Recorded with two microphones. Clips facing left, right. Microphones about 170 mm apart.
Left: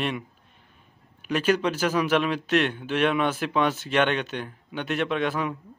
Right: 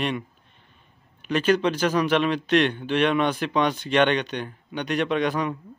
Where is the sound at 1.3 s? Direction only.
10° left (ahead or behind).